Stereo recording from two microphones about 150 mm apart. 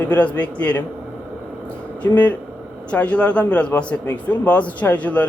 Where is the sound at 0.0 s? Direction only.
10° left (ahead or behind).